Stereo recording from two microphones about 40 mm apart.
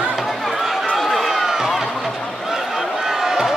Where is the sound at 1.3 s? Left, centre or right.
Centre.